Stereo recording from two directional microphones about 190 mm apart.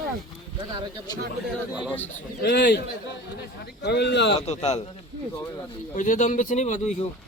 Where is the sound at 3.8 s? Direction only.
60° left (ahead or behind).